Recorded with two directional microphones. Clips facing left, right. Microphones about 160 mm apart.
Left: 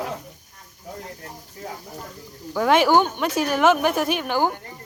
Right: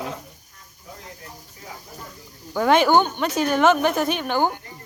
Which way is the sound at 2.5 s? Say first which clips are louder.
Even; centre (ahead or behind).